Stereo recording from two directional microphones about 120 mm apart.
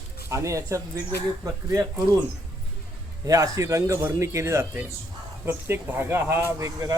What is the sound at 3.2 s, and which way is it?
Speech, 30° right (ahead or behind).